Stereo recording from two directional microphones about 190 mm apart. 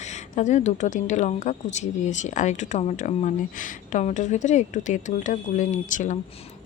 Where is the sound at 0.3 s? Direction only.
40° left (ahead or behind).